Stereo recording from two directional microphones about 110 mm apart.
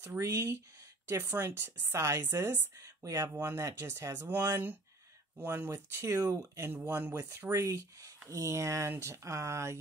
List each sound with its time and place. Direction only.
0.0 s speech: 20° right (ahead or behind)
6.8 s speech: 15° right (ahead or behind)